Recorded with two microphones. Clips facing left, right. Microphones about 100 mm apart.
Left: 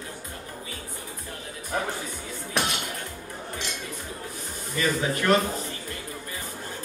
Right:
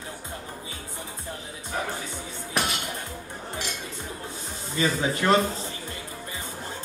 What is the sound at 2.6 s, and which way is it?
Dishes, centre (ahead or behind).